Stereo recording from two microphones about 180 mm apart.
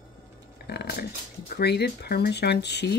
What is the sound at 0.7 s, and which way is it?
Dog, 60° left (ahead or behind).